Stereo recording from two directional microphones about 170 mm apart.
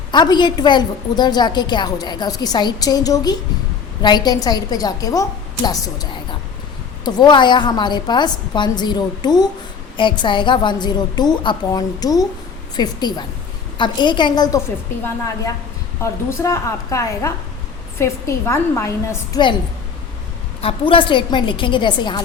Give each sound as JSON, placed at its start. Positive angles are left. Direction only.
{"t": 0.1, "sound": "a woman's voice", "side_deg": 25}
{"t": 16.4, "sound": "a woman's voice", "side_deg": 20}
{"t": 20.6, "sound": "a woman's voice", "side_deg": 30}